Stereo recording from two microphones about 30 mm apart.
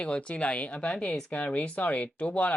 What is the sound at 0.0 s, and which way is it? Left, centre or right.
Speech, left.